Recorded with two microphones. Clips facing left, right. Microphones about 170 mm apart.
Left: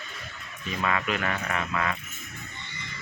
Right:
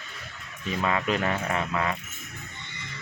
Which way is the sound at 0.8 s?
30° right (ahead or behind).